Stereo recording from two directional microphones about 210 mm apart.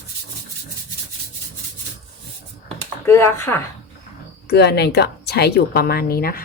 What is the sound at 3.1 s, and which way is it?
Speech, 10° left (ahead or behind).